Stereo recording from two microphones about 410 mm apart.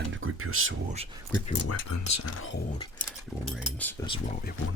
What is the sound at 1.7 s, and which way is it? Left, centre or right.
Speech, left.